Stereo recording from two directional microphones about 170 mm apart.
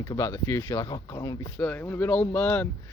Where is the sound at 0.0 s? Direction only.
20° left (ahead or behind).